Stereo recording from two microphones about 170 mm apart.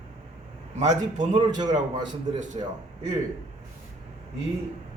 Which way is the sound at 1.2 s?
45° right (ahead or behind).